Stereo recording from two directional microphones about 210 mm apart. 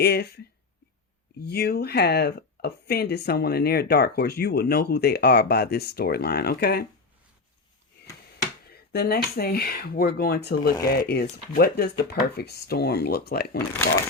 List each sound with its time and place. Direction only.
0.0 s speech: 50° left (ahead or behind)
1.4 s speech: 50° left (ahead or behind)
8.7 s speech: 50° left (ahead or behind)